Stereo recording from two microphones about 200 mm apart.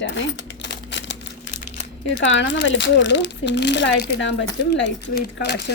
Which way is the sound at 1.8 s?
60° left (ahead or behind).